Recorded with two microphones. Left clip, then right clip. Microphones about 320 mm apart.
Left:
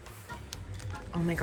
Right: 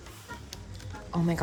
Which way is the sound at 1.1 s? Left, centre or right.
Centre.